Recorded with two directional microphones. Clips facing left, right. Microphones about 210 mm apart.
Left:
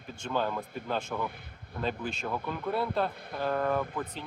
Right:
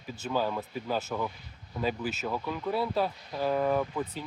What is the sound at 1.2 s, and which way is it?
Speech, 55° left (ahead or behind).